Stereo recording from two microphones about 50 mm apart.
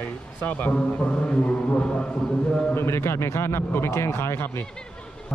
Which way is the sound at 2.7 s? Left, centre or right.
Left.